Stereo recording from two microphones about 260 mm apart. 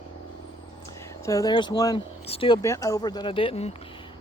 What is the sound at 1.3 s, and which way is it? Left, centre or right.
Speech, centre.